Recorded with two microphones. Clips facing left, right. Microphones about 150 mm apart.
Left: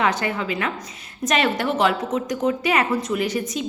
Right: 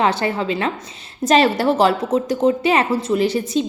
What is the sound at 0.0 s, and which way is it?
A woman's voice, 30° right (ahead or behind).